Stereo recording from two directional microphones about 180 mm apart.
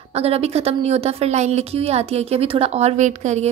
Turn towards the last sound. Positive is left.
turn(degrees=-40)  # may be behind; listen again after turning